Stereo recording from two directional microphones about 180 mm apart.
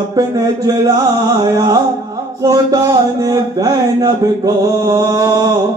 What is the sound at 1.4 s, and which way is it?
Mantra, 20° right (ahead or behind).